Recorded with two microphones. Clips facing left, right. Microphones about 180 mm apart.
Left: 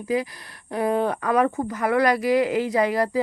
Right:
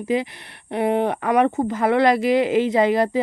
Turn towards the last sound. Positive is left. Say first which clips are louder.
# right 3 dB
turn(degrees=-25)  # may be behind; listen again after turning